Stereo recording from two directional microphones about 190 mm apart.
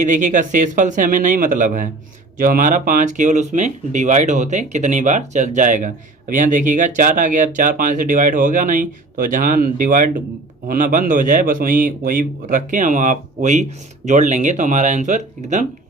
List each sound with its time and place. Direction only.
0.0 s a man's voice: 40° right (ahead or behind)